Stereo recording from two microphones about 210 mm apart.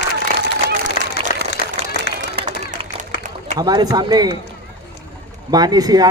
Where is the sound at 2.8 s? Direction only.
25° right (ahead or behind).